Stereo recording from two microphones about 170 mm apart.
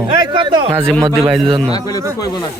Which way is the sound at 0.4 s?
25° right (ahead or behind).